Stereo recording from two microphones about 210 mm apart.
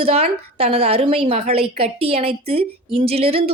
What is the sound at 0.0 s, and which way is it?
A woman's voice, 30° right (ahead or behind).